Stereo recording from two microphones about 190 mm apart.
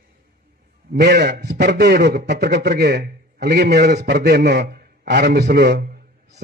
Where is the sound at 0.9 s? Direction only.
60° right (ahead or behind).